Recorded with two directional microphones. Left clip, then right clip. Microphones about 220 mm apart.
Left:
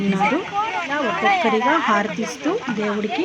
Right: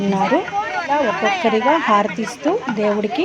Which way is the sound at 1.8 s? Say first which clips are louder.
Right 3 dB; 5° right (ahead or behind).